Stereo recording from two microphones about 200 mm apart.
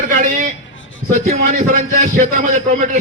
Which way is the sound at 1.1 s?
35° right (ahead or behind).